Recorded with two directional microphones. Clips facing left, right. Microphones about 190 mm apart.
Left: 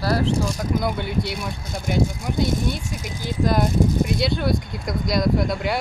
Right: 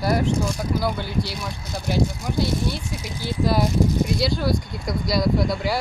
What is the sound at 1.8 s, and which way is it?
Speech, 55° left (ahead or behind).